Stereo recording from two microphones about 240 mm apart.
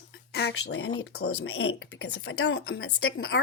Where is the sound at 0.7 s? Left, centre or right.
Left.